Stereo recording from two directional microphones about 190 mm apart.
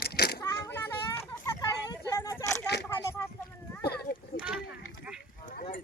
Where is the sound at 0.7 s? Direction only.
10° left (ahead or behind).